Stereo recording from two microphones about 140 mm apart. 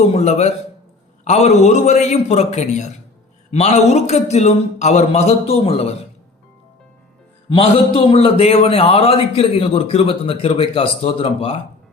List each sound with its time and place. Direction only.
0.0 s a man's voice: 50° left (ahead or behind)
7.5 s a man's voice: 40° left (ahead or behind)